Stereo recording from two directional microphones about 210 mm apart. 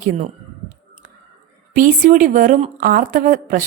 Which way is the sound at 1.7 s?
40° right (ahead or behind).